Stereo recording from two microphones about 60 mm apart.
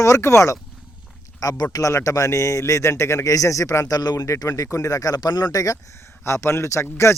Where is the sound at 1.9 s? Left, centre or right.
Left.